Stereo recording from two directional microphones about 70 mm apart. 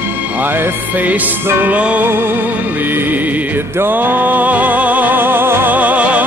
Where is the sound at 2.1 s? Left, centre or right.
Right.